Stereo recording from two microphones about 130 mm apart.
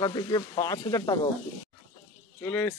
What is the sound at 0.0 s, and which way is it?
Speech, 30° left (ahead or behind).